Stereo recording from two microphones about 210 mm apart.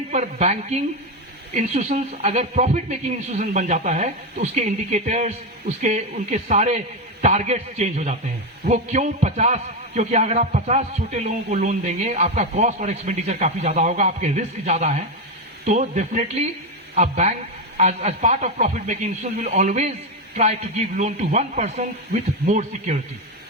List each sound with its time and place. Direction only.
0.1 s a man's voice: 35° right (ahead or behind)